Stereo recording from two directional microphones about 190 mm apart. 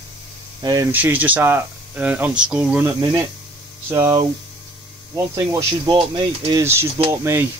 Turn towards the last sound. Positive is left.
turn(degrees=-15)  # may be behind; listen again after turning